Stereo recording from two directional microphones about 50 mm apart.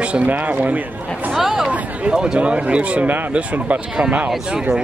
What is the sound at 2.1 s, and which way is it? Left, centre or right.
Speech, centre.